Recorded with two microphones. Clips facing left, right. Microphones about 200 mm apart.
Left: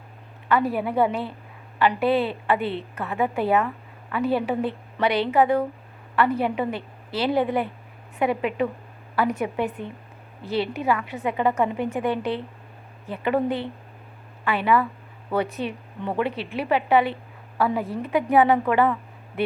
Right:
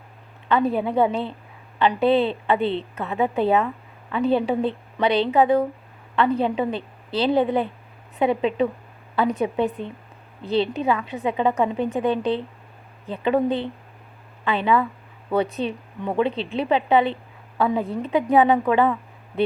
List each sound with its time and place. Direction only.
0.6 s a woman's voice: centre (ahead or behind)
0.9 s a woman's voice: 20° right (ahead or behind)